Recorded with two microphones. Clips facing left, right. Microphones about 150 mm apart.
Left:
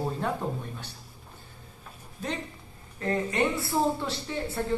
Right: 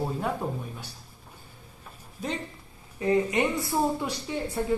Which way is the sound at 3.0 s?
15° right (ahead or behind).